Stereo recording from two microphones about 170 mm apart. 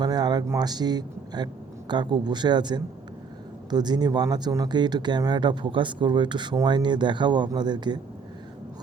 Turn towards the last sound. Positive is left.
turn(degrees=-25)  # may be behind; listen again after turning